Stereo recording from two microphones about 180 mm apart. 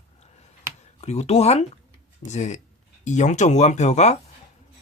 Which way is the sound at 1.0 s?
35° left (ahead or behind).